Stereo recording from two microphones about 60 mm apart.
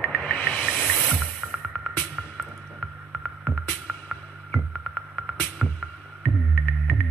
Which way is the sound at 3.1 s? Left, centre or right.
Centre.